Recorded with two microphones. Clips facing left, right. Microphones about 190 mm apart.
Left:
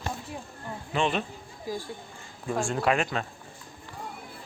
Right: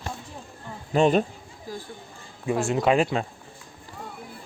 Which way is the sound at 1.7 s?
15° left (ahead or behind).